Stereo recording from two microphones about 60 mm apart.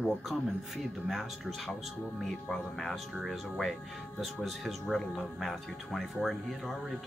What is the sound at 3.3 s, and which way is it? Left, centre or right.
Speech, centre.